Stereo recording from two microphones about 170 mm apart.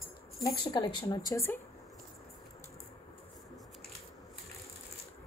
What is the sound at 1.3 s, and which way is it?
Speech, 15° left (ahead or behind).